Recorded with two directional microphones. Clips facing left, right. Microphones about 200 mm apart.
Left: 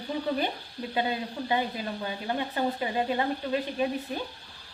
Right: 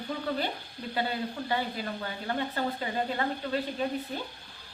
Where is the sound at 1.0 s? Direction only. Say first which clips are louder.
Left 2 dB; 20° left (ahead or behind).